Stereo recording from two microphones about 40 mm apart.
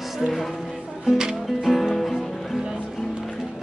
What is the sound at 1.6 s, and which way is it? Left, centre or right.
Music, centre.